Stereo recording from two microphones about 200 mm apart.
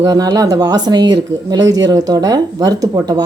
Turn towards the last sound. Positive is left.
turn(degrees=-20)  # may be behind; listen again after turning